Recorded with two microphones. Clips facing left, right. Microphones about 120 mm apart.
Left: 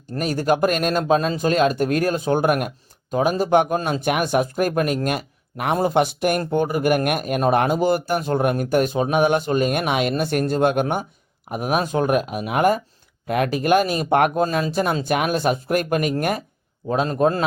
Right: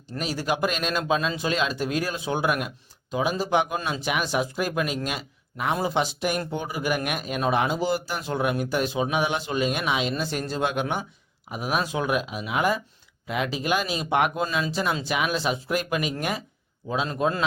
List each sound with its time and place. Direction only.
0.2 s speech: 50° left (ahead or behind)